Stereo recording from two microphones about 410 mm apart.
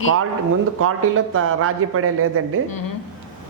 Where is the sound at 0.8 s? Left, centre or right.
Right.